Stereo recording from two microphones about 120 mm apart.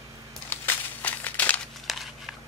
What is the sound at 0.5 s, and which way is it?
Crushing, 15° left (ahead or behind).